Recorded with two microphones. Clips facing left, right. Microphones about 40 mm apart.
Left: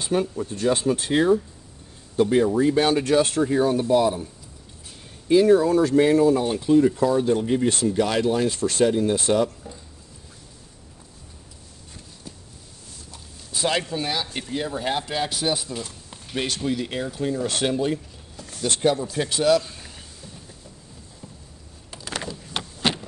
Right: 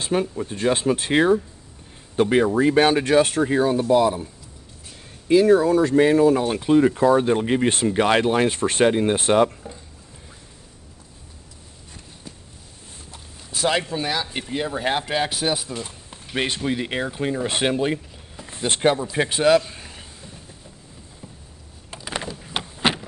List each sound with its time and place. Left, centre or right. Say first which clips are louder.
0.4 s speech: right 1 dB; right
5.3 s speech: right 1 dB; right
12.9 s walk: right 2 dB; right
13.7 s speech: right 2 dB; right
19.7 s a sound: right 2 dB; right
21.9 s a sound: right 2 dB; centre